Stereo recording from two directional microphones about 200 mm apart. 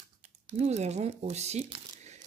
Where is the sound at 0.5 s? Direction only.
35° right (ahead or behind).